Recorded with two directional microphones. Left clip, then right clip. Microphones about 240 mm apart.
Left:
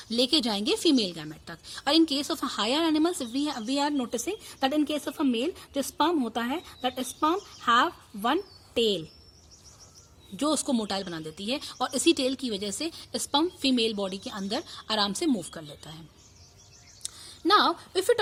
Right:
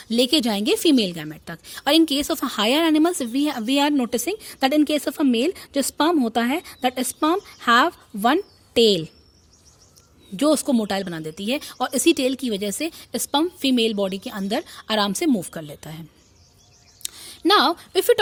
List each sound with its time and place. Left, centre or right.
0.0 s a woman's voice: right
10.3 s a woman's voice: right
17.0 s a sound: right